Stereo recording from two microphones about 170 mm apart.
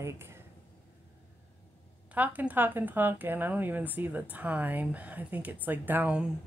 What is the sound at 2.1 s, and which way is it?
A woman's voice, 10° right (ahead or behind).